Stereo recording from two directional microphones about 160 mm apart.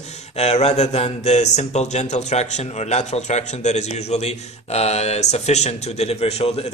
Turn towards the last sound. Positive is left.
turn(degrees=40)  # may be behind; listen again after turning